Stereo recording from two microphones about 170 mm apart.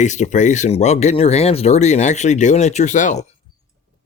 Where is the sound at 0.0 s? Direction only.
45° left (ahead or behind).